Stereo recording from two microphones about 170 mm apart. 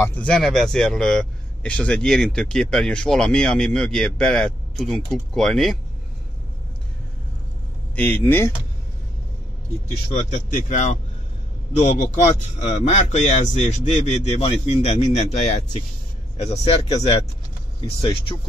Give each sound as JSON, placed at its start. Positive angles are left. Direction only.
{"t": 0.0, "sound": "a man's voice", "side_deg": 10}
{"t": 7.9, "sound": "speech", "side_deg": 10}
{"t": 10.1, "sound": "speech", "side_deg": 45}